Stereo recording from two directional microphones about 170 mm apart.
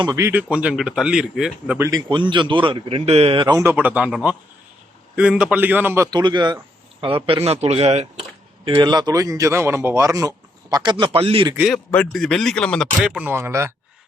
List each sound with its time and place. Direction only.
0.0 s a man's voice: 20° right (ahead or behind)
2.0 s a man's voice: 30° right (ahead or behind)
11.7 s speech: 5° left (ahead or behind)
13.2 s a man's voice: 15° right (ahead or behind)